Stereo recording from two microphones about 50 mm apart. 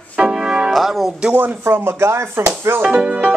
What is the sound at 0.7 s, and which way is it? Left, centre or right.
Music, centre.